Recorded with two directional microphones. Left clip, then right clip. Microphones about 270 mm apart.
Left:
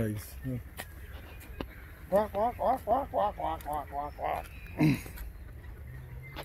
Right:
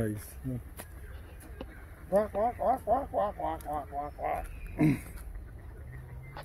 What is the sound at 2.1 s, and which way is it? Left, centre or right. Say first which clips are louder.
Speech: even; left.